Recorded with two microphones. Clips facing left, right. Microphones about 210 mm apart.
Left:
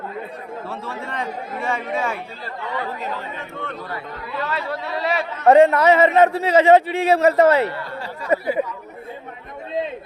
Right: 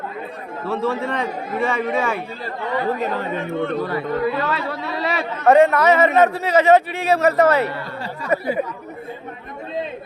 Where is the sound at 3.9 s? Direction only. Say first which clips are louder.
Right 9 dB; 90° right.